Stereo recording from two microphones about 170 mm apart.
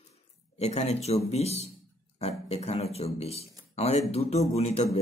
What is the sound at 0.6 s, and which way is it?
Speech, 40° left (ahead or behind).